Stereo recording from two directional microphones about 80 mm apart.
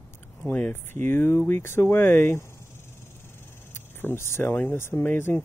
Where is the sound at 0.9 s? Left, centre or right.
Left.